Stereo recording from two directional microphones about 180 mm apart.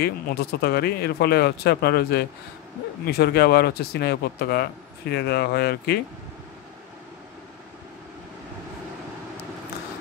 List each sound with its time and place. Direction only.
0.0 s speech: 60° left (ahead or behind)